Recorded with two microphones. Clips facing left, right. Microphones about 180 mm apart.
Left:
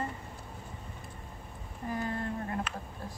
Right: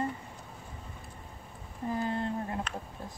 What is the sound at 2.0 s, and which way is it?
Speech, 25° right (ahead or behind).